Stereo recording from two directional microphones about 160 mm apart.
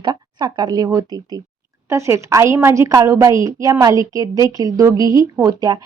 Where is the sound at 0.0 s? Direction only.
25° right (ahead or behind).